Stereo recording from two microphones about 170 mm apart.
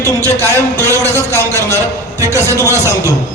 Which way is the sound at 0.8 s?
15° right (ahead or behind).